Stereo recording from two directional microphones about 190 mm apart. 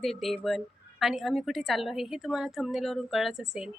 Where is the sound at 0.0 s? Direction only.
Centre (ahead or behind).